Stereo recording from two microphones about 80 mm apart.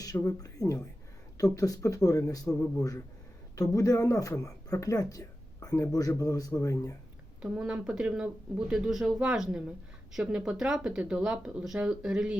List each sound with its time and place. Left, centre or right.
0.0 s speech: left
7.4 s speech: centre